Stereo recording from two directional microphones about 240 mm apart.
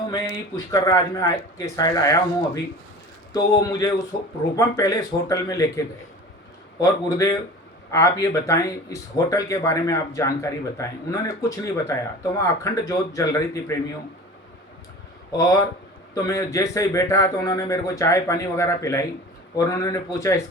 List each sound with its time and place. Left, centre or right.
0.1 s speech: centre
3.3 s speech: centre
15.3 s speech: centre